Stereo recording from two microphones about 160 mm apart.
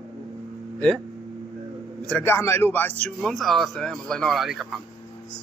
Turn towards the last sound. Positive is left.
turn(degrees=0)  # may be behind; listen again after turning